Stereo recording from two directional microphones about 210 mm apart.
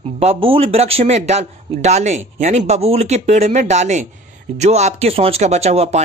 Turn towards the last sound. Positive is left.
turn(degrees=-30)  # may be behind; listen again after turning